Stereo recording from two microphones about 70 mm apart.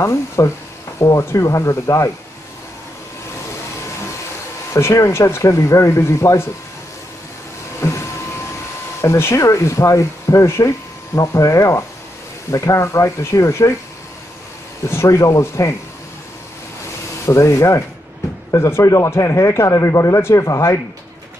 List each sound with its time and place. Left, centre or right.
0.0 s speech: left
4.7 s speech: left
7.8 s a sound: left
9.0 s speech: left
14.9 s speech: left
17.3 s speech: left